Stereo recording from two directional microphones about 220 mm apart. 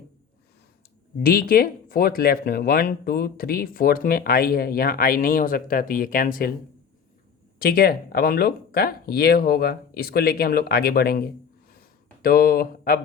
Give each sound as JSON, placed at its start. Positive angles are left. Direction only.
{"t": 1.2, "sound": "speech", "side_deg": 40}
{"t": 7.6, "sound": "speech", "side_deg": 45}
{"t": 11.7, "sound": "a sound", "side_deg": 40}